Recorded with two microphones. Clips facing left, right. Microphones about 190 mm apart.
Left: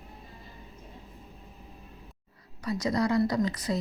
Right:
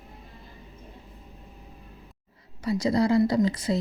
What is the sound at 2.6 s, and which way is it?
A woman's voice, 25° right (ahead or behind).